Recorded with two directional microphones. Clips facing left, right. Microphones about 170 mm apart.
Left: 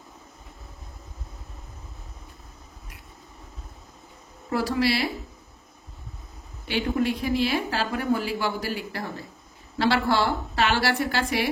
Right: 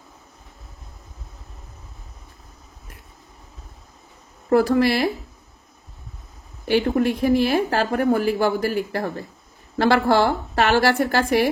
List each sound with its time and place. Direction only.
4.5 s speech: 55° right (ahead or behind)
6.7 s speech: 50° right (ahead or behind)